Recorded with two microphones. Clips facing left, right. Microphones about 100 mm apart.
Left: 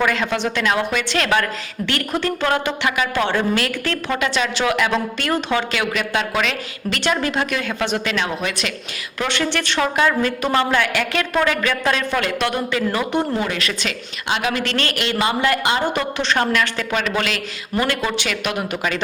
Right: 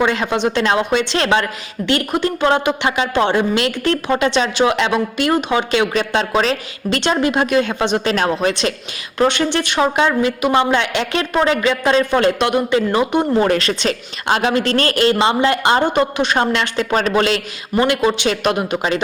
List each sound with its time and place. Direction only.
0.0 s a woman's voice: 25° right (ahead or behind)
7.0 s a woman's voice: 20° right (ahead or behind)
8.1 s a woman's voice: 40° right (ahead or behind)
9.1 s a woman's voice: 25° right (ahead or behind)